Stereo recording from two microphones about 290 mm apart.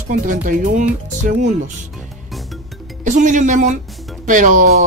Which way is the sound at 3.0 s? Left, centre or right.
Right.